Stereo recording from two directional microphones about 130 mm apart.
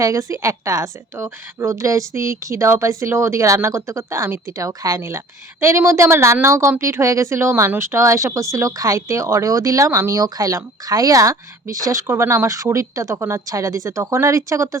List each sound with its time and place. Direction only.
0.0 s a woman's voice: 25° right (ahead or behind)